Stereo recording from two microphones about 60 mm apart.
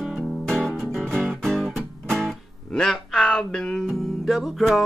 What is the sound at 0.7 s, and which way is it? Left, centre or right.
Music, centre.